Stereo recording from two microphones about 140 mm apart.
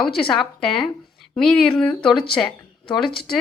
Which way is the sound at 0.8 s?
5° left (ahead or behind).